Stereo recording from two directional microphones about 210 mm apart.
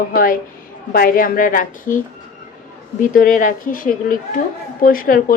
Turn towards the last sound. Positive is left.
turn(degrees=40)  # may be behind; listen again after turning